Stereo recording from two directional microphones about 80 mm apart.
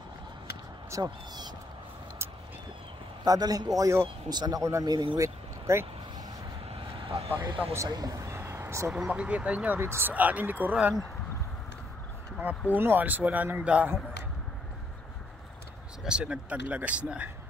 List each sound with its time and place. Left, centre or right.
0.8 s speech: right
3.3 s a man's voice: right
4.8 s speech: right
5.2 s vehicle: right
6.9 s vehicle: right
7.9 s a sound: right
8.9 s speech: centre
9.8 s speech: right
12.7 s speech: right
16.0 s speech: centre